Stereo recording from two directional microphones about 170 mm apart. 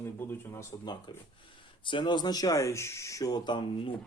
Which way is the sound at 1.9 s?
25° left (ahead or behind).